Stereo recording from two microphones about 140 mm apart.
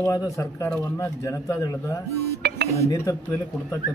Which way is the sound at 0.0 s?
25° left (ahead or behind).